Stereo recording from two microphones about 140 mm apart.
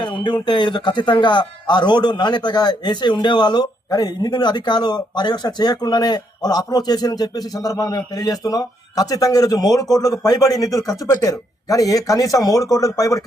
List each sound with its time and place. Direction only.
0.0 s speech: 35° left (ahead or behind)